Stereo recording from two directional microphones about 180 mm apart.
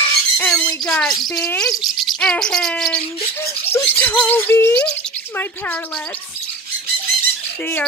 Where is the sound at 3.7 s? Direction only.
10° left (ahead or behind).